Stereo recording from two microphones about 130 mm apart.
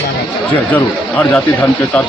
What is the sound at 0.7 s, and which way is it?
Speech, 10° left (ahead or behind).